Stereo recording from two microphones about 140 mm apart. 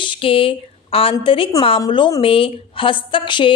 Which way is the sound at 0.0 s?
40° left (ahead or behind).